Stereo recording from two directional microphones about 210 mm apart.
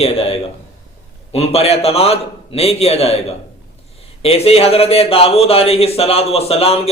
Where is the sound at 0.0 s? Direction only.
30° left (ahead or behind).